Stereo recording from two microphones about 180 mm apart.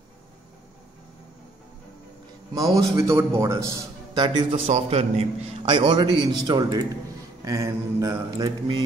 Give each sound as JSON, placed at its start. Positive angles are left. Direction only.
{"t": 2.5, "sound": "a man's voice", "side_deg": -20}
{"t": 4.6, "sound": "a man's voice", "side_deg": -40}